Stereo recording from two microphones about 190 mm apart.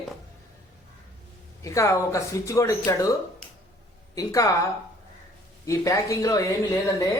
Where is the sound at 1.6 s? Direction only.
15° left (ahead or behind).